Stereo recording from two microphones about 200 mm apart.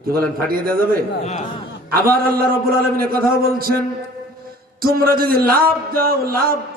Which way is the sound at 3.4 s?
50° right (ahead or behind).